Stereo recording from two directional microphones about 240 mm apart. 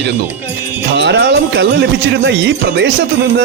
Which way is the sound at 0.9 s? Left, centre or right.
Right.